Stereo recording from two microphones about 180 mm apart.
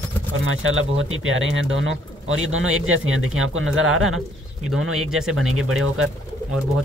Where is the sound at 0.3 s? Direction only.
90° right.